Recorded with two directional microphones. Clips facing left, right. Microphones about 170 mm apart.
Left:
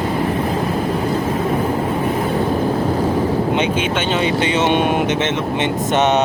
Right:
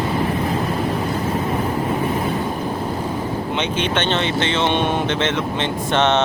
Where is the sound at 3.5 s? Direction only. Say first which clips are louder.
Left 3 dB; 5° left (ahead or behind).